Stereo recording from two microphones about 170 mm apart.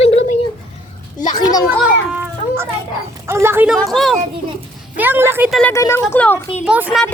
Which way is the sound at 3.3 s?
15° right (ahead or behind).